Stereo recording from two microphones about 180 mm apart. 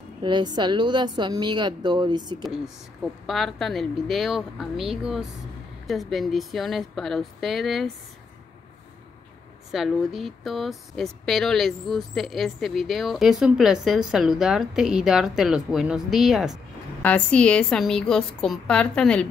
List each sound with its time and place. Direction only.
0.2 s a woman's voice: 25° right (ahead or behind)
3.3 s speech: centre (ahead or behind)
9.7 s speech: centre (ahead or behind)